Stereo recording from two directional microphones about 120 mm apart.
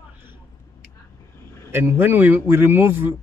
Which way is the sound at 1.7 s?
20° right (ahead or behind).